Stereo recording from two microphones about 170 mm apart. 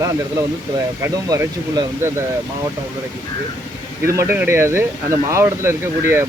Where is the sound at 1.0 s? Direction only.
20° right (ahead or behind).